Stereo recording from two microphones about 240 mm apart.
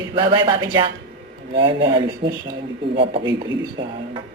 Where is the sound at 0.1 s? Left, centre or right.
Centre.